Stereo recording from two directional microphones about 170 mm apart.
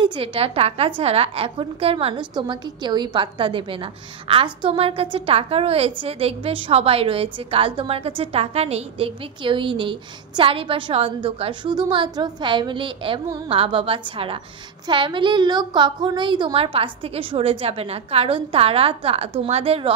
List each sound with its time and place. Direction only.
0.0 s a woman's voice: 30° right (ahead or behind)